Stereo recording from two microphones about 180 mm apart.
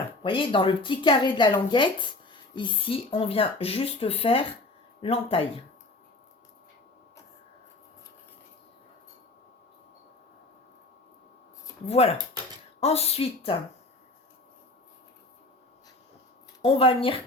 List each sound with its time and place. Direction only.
0.2 s speech: 30° left (ahead or behind)
11.9 s speech: 35° left (ahead or behind)
16.6 s speech: 30° left (ahead or behind)